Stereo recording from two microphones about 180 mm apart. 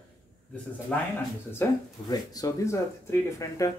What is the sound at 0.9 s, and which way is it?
Speech, 5° left (ahead or behind).